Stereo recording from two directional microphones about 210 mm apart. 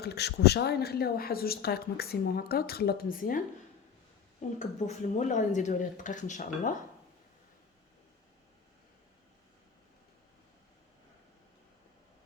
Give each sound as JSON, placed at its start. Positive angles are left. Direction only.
{"t": 0.0, "sound": "a woman's voice", "side_deg": 50}